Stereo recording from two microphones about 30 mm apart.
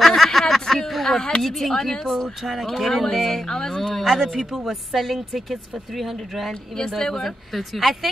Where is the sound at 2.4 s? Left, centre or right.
Centre.